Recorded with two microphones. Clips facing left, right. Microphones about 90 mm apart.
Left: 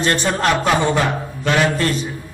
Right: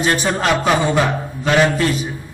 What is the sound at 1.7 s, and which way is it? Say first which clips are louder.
Speech: right 1 dB; 10° right (ahead or behind).